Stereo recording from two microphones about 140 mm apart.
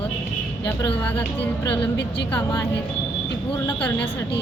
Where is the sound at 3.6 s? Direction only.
10° left (ahead or behind).